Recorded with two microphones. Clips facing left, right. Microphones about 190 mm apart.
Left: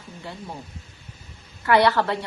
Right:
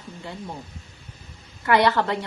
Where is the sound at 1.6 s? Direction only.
20° right (ahead or behind).